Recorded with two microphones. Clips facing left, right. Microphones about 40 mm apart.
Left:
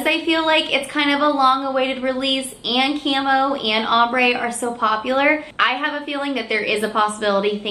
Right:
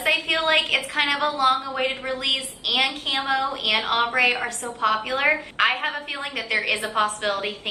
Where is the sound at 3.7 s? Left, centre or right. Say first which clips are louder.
Left 4 dB; centre.